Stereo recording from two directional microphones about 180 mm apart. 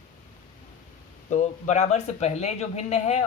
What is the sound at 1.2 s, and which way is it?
Speech, 40° left (ahead or behind).